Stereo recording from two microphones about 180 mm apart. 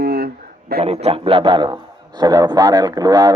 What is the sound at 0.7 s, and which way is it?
Speech, 60° right (ahead or behind).